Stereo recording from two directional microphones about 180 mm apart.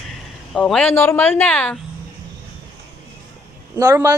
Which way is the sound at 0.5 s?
5° left (ahead or behind).